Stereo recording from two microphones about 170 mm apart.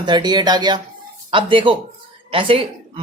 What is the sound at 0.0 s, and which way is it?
Speech, 25° right (ahead or behind).